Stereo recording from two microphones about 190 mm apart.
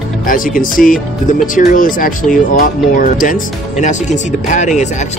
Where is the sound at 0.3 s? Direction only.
45° left (ahead or behind).